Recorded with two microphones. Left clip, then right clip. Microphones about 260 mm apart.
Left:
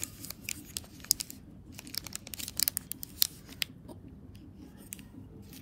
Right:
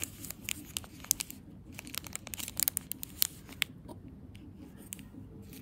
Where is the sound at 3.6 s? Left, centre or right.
Right.